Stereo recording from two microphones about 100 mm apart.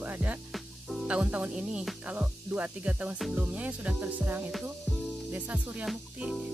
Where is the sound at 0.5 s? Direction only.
Centre (ahead or behind).